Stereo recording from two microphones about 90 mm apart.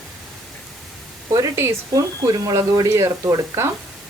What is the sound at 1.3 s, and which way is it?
Speech, 35° right (ahead or behind).